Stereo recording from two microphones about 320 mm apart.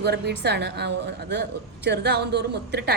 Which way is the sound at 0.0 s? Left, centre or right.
Right.